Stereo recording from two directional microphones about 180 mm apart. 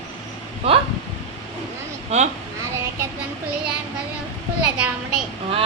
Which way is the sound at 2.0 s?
40° right (ahead or behind).